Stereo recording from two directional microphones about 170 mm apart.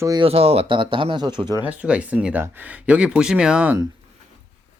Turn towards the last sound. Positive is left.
turn(degrees=-5)  # may be behind; listen again after turning